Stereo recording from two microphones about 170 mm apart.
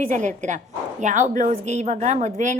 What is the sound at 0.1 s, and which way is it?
A woman's voice, 45° right (ahead or behind).